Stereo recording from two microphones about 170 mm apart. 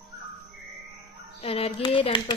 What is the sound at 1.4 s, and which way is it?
Speech, 35° left (ahead or behind).